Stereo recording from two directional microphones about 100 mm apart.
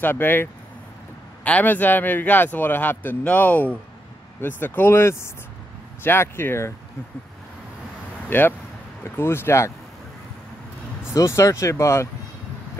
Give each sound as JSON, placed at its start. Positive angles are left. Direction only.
{"t": 0.0, "sound": "a man's voice", "side_deg": 20}
{"t": 8.3, "sound": "a man's voice", "side_deg": 20}
{"t": 11.1, "sound": "a man's voice", "side_deg": 30}